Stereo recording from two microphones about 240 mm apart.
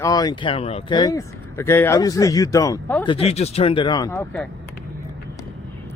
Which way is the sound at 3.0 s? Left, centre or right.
Left.